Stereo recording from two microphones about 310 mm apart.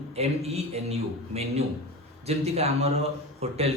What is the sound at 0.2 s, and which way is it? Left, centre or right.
Speech, centre.